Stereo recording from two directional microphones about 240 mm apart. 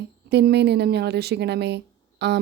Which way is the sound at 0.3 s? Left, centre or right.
Right.